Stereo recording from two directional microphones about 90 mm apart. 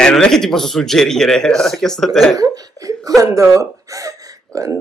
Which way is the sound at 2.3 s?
45° right (ahead or behind).